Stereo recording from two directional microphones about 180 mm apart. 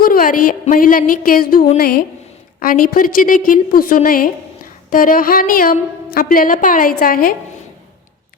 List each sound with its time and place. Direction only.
0.0 s a woman's voice: 50° left (ahead or behind)